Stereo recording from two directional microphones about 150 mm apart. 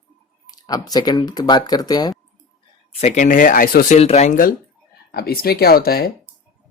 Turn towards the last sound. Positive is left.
turn(degrees=90)